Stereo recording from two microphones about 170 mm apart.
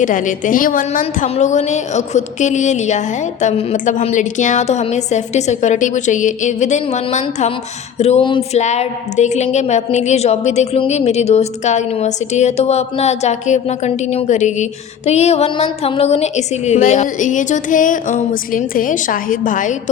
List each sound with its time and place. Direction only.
0.0 s a woman's voice: 50° left (ahead or behind)